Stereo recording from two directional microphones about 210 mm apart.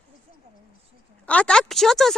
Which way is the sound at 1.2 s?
5° left (ahead or behind).